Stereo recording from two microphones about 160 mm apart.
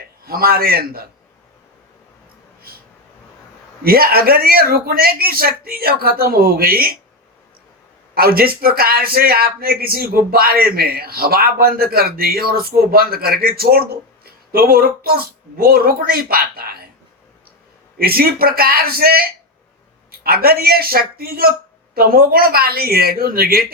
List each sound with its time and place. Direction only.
0.3 s speech: 70° right (ahead or behind)
3.8 s speech: 70° right (ahead or behind)
8.1 s speech: 70° right (ahead or behind)
17.9 s speech: 70° right (ahead or behind)